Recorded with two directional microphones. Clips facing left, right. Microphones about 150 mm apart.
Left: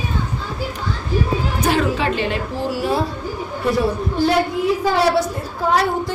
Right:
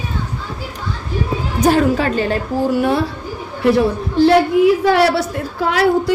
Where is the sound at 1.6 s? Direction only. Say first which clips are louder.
Right 6 dB; 40° right (ahead or behind).